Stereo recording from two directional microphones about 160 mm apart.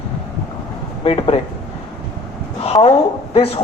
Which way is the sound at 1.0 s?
35° left (ahead or behind).